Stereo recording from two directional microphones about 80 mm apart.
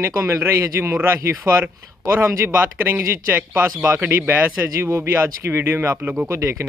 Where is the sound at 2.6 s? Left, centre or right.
Right.